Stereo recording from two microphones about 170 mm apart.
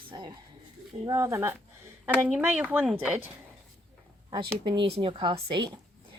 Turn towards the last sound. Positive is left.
turn(degrees=-25)  # may be behind; listen again after turning